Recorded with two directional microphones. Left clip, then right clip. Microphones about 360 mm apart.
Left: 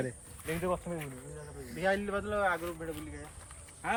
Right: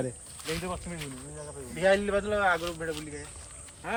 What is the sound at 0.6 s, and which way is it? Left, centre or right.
Speech, left.